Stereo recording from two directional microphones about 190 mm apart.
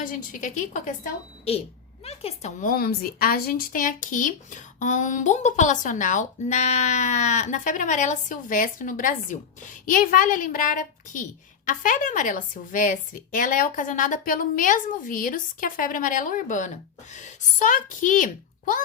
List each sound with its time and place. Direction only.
0.0 s a woman's voice: 45° left (ahead or behind)
2.0 s a woman's voice: 35° left (ahead or behind)